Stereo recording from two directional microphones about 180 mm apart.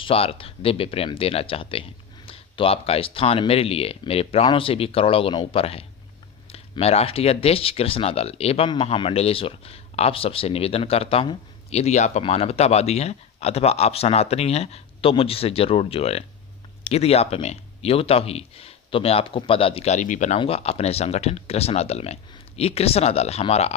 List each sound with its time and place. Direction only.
0.0 s speech: 30° left (ahead or behind)